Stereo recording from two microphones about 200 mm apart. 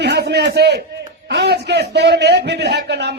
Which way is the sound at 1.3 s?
55° right (ahead or behind).